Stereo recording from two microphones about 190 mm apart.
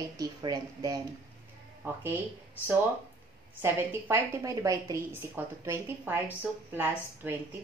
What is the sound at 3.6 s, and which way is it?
A woman's voice, 15° right (ahead or behind).